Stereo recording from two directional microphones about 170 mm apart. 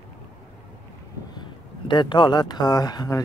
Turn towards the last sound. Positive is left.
turn(degrees=25)  # may be behind; listen again after turning